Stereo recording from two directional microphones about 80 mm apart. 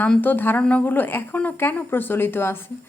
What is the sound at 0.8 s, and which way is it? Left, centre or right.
A woman's voice, left.